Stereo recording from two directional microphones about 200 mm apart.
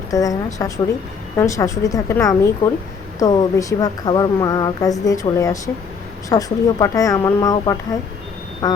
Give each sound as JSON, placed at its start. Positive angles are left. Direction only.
{"t": 0.1, "sound": "a woman's voice", "side_deg": 15}